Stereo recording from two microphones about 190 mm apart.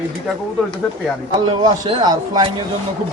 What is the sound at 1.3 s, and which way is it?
Speech, 25° right (ahead or behind).